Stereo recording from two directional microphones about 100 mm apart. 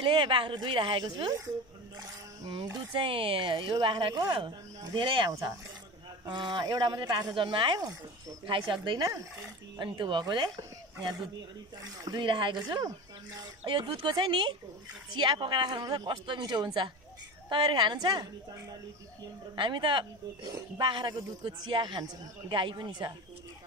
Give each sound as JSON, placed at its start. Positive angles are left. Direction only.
{"t": 0.0, "sound": "speech", "side_deg": -55}
{"t": 2.4, "sound": "speech", "side_deg": -50}
{"t": 7.3, "sound": "speech", "side_deg": -55}
{"t": 13.7, "sound": "speech", "side_deg": -50}
{"t": 19.5, "sound": "speech", "side_deg": -50}